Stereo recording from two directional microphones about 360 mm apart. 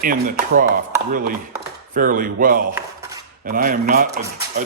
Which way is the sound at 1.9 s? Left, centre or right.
Right.